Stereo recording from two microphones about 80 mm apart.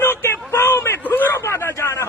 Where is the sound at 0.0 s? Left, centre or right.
Left.